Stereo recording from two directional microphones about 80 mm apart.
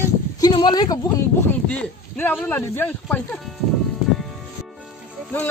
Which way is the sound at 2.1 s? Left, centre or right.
Left.